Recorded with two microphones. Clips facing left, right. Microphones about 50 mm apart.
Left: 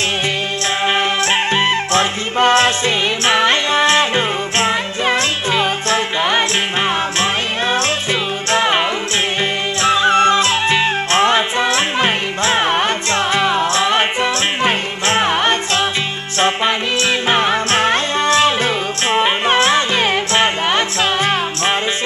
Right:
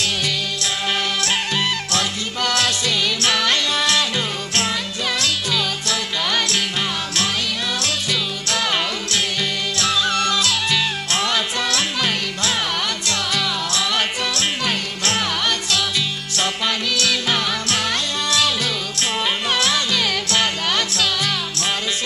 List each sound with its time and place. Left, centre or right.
0.8 s music: left
7.7 s music: left